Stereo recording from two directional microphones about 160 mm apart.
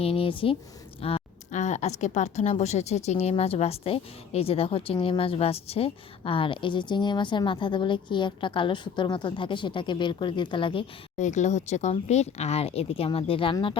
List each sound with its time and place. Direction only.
0.0 s a woman's voice: 35° left (ahead or behind)
11.2 s a woman's voice: 45° left (ahead or behind)